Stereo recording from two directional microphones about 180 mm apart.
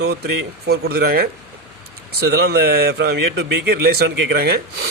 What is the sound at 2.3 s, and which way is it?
Speech, 60° right (ahead or behind).